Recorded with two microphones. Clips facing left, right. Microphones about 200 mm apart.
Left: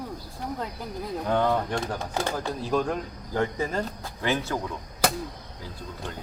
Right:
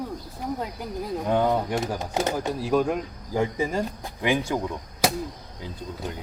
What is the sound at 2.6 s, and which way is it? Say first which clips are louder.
Speech: right 3 dB; 10° right (ahead or behind).